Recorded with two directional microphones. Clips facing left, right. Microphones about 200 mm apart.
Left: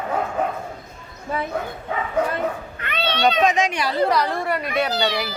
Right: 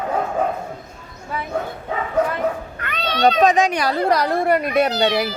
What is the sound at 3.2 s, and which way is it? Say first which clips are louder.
Speech: right 4 dB; 35° right (ahead or behind).